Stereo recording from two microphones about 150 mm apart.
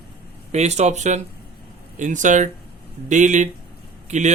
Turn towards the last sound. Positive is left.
turn(degrees=-55)  # may be behind; listen again after turning